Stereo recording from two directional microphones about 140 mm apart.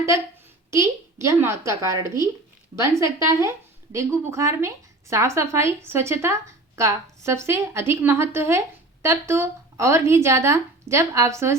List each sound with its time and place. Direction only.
0.7 s a woman's voice: 20° right (ahead or behind)